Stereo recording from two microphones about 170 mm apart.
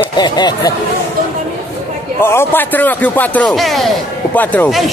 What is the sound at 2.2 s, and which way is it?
Speech, 15° left (ahead or behind).